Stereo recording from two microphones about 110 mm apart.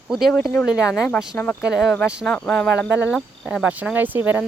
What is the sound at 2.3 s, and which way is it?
Speech, 10° left (ahead or behind).